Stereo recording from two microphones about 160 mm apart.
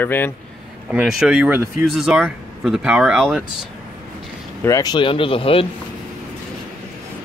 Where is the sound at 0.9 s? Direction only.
5° right (ahead or behind).